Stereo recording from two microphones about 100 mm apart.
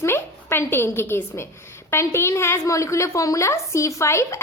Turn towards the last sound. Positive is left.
turn(degrees=30)  # may be behind; listen again after turning